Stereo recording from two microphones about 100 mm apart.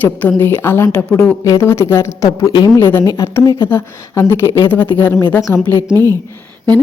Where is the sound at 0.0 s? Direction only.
20° left (ahead or behind); by 3.5 s 35° left (ahead or behind).